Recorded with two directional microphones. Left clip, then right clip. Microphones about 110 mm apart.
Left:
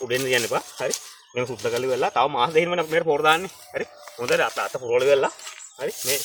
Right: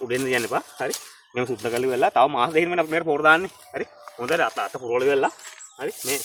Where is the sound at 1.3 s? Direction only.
75° right (ahead or behind); by 3.3 s 55° right (ahead or behind).